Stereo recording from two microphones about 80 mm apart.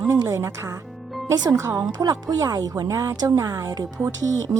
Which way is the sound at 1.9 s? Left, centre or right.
Right.